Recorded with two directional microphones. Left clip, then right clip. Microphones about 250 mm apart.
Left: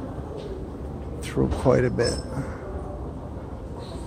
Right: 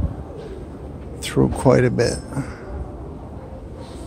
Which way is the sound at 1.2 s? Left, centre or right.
Centre.